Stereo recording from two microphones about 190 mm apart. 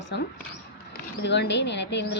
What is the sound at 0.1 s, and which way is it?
Speech, 65° left (ahead or behind).